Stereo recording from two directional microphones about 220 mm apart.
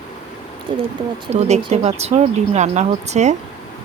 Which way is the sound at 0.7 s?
20° right (ahead or behind).